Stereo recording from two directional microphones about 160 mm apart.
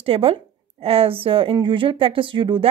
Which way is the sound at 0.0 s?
35° right (ahead or behind).